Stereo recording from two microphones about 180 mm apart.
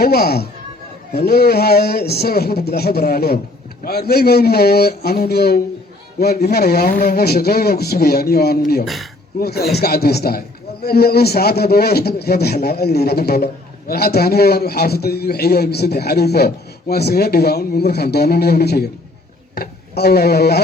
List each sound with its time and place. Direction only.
0.0 s a man's voice: 60° left (ahead or behind)